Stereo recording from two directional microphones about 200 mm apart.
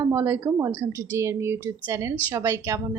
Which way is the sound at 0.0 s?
20° right (ahead or behind).